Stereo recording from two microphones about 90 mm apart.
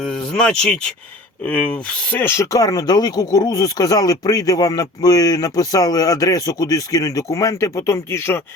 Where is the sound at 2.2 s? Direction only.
30° left (ahead or behind).